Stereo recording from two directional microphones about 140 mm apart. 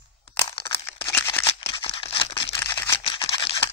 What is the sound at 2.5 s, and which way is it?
Camera, 20° left (ahead or behind).